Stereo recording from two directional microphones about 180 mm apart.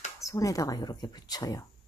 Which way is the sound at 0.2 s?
20° left (ahead or behind).